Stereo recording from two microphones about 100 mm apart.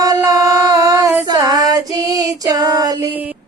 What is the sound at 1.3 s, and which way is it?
Female singing, 40° right (ahead or behind).